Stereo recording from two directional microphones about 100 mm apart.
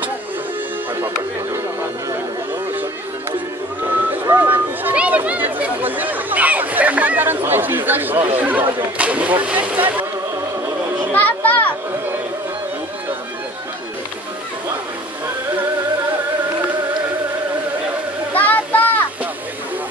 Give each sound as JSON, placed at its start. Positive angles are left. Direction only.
{"t": 3.8, "sound": "vehicle", "side_deg": -20}
{"t": 8.4, "sound": "speech", "side_deg": -15}
{"t": 11.1, "sound": "children playing", "side_deg": 15}
{"t": 18.3, "sound": "a sound", "side_deg": 15}